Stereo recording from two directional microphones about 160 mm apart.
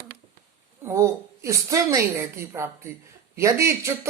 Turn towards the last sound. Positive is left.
turn(degrees=-15)  # may be behind; listen again after turning